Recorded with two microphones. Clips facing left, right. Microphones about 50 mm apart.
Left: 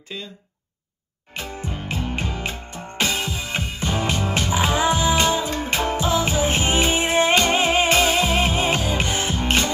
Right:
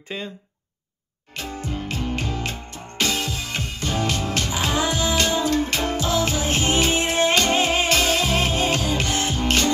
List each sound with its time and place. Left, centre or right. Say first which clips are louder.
0.1 s speech: right 3 dB; right
1.3 s music: right 1 dB; centre